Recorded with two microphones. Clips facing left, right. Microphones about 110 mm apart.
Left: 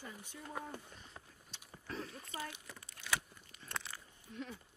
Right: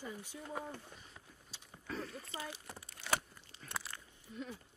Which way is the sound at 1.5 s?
Centre (ahead or behind).